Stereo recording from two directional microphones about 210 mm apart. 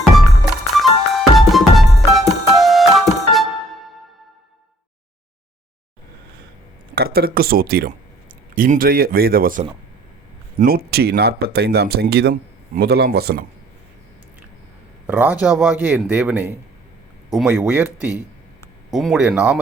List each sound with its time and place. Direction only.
0.8 s music: centre (ahead or behind)
6.9 s speech: 50° right (ahead or behind)
15.0 s a man's voice: 10° right (ahead or behind)
18.9 s speech: centre (ahead or behind)